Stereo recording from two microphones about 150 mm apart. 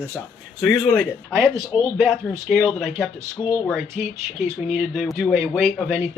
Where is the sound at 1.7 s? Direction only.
30° left (ahead or behind).